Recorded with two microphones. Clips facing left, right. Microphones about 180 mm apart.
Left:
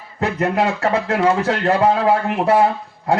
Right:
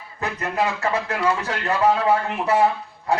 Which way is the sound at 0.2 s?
70° left (ahead or behind).